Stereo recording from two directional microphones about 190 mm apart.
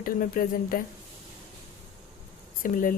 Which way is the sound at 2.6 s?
45° left (ahead or behind).